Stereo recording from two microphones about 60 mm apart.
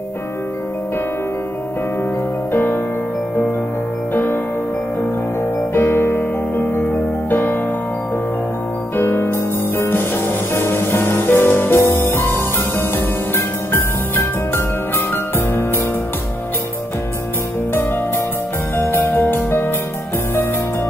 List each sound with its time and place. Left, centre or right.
2.5 s music: left
4.1 s music: left
5.8 s music: left
8.9 s music: left
18.8 s music: left